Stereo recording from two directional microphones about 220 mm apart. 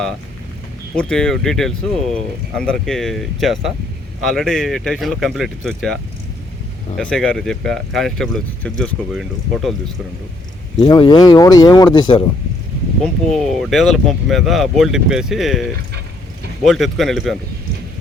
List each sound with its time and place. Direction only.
0.9 s speech: 5° left (ahead or behind)
10.8 s speech: 20° left (ahead or behind)
13.3 s speech: centre (ahead or behind)
16.6 s speech: centre (ahead or behind)